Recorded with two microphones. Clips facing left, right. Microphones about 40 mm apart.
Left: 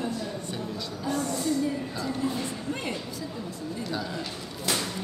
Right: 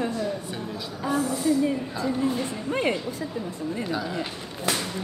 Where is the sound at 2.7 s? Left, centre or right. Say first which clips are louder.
Right 9 dB; right.